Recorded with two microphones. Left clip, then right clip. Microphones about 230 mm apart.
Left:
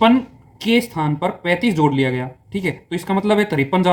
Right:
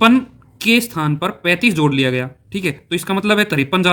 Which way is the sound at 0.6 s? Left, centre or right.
Right.